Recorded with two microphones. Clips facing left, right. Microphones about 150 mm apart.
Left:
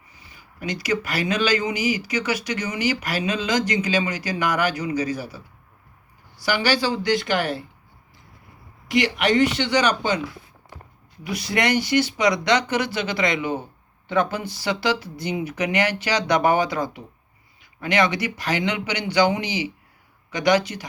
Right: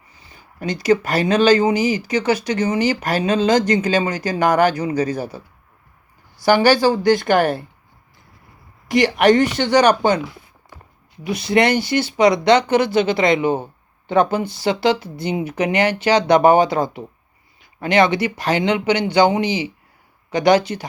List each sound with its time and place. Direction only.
1.4 s speech: 45° right (ahead or behind)
6.4 s speech: 50° right (ahead or behind)
8.9 s speech: 45° right (ahead or behind)
11.3 s speech: 25° right (ahead or behind)